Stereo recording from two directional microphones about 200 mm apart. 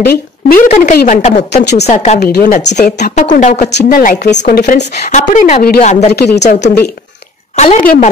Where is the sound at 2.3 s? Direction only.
50° left (ahead or behind).